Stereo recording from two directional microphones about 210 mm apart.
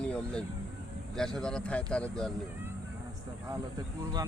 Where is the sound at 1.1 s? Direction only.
5° left (ahead or behind).